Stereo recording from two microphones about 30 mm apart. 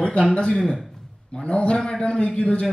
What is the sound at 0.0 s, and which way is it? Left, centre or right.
Speech, left.